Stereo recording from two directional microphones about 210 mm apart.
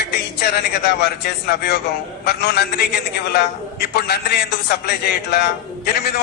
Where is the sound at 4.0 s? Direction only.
50° left (ahead or behind).